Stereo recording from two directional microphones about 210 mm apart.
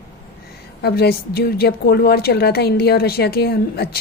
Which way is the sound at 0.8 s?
50° left (ahead or behind).